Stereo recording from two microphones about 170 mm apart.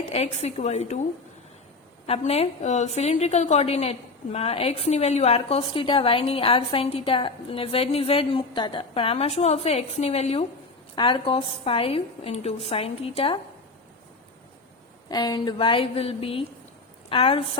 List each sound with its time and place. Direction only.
0.1 s a woman's voice: 40° left (ahead or behind)
2.0 s a woman's voice: 35° left (ahead or behind)
15.1 s a woman's voice: 25° left (ahead or behind)